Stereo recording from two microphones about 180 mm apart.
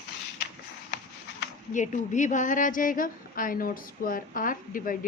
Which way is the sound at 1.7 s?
40° left (ahead or behind).